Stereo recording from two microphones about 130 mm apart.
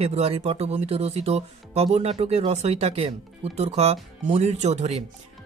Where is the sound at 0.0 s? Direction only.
50° right (ahead or behind).